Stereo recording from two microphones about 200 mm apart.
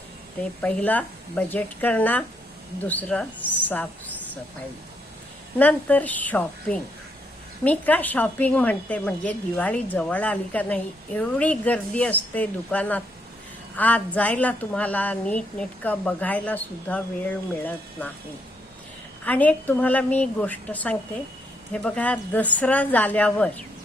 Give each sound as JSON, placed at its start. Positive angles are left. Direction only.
{"t": 0.6, "sound": "a woman's voice", "side_deg": 5}
{"t": 5.5, "sound": "a woman's voice", "side_deg": 10}
{"t": 19.2, "sound": "a woman's voice", "side_deg": 5}